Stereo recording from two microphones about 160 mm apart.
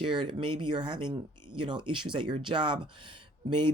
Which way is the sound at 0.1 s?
30° right (ahead or behind).